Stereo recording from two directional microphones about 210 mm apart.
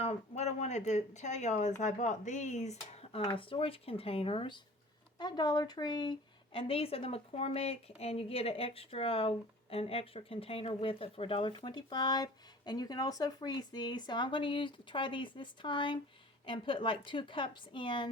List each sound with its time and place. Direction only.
0.0 s a woman's voice: 30° left (ahead or behind)